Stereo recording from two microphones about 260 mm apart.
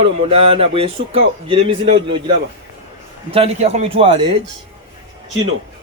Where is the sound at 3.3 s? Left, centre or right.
Right.